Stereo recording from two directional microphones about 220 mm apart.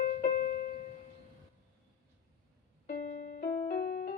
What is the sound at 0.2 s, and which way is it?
Keyboard, 35° left (ahead or behind).